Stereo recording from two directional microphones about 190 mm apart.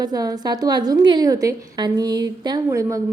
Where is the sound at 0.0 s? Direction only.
20° right (ahead or behind).